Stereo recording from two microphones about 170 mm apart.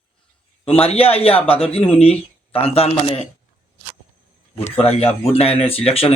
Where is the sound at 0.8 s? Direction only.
35° left (ahead or behind).